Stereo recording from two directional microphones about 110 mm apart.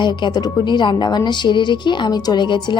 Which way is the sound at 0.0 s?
45° left (ahead or behind).